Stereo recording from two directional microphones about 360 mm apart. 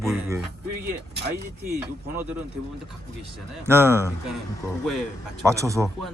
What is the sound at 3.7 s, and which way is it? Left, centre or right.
Speech, centre.